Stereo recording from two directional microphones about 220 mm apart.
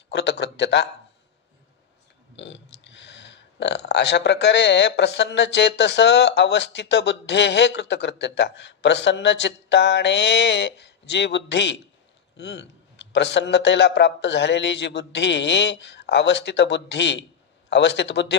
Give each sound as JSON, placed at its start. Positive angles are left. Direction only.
{"t": 0.1, "sound": "speech", "side_deg": 50}
{"t": 2.3, "sound": "speech", "side_deg": 55}